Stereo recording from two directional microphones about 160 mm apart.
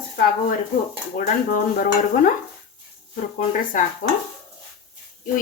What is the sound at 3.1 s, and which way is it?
Speech, 55° left (ahead or behind).